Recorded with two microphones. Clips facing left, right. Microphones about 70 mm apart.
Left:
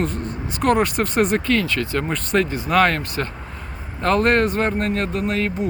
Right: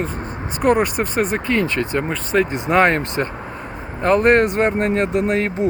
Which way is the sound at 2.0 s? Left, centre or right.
Centre.